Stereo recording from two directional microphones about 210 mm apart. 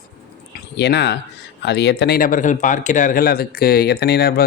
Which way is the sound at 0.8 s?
55° left (ahead or behind).